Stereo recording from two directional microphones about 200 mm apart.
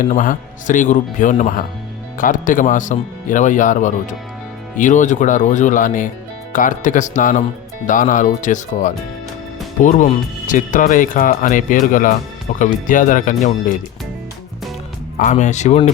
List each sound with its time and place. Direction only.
0.0 s speech: 40° left (ahead or behind)
15.2 s speech: 35° left (ahead or behind)